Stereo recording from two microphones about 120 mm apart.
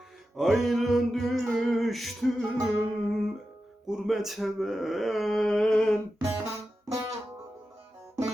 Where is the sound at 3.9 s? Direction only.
5° right (ahead or behind).